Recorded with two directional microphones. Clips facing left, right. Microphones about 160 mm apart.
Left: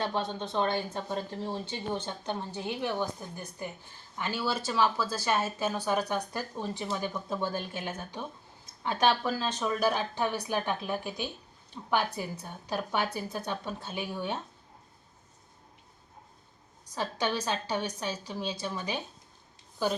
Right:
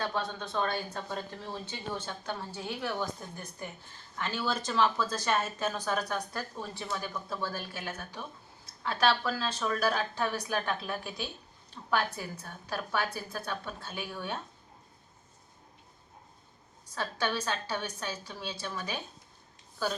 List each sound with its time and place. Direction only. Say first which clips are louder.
0.0 s a woman's voice: left 2 dB; 25° left (ahead or behind)
16.9 s a woman's voice: left 2 dB; 15° left (ahead or behind)